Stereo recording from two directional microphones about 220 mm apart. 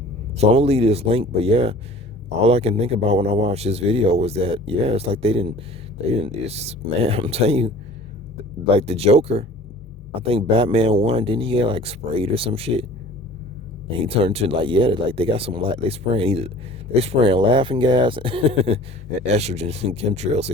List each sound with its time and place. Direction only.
0.3 s a man's voice: 30° right (ahead or behind)
8.7 s a man's voice: 25° right (ahead or behind)
14.0 s a man's voice: 25° right (ahead or behind)